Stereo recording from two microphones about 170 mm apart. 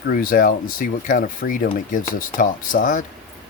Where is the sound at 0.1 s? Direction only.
55° left (ahead or behind).